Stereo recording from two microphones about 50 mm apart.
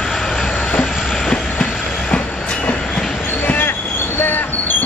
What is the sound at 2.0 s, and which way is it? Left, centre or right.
Train, left.